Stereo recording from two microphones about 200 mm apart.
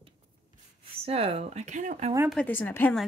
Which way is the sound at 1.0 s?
30° right (ahead or behind).